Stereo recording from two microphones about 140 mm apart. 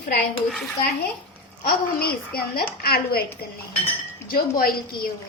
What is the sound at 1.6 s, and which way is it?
Speech, 90° left.